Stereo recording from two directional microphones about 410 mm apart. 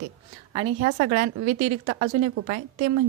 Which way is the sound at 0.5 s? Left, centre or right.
Centre.